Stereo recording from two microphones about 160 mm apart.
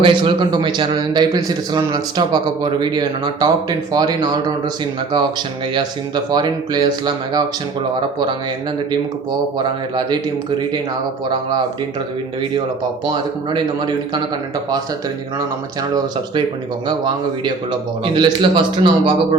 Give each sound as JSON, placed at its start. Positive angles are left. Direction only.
{"t": 0.0, "sound": "a man's voice", "side_deg": -30}
{"t": 6.3, "sound": "a man's voice", "side_deg": -25}
{"t": 13.5, "sound": "a man's voice", "side_deg": -30}
{"t": 17.4, "sound": "a man's voice", "side_deg": -30}